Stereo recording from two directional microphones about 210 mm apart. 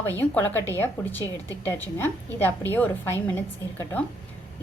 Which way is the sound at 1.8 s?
10° left (ahead or behind).